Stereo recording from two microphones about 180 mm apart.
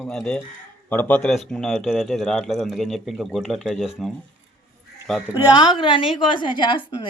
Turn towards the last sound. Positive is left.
turn(degrees=25)  # may be behind; listen again after turning